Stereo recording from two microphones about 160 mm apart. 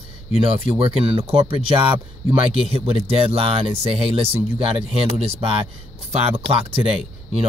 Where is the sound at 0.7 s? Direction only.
35° right (ahead or behind).